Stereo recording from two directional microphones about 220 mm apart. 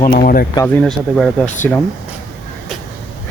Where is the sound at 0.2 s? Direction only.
40° left (ahead or behind).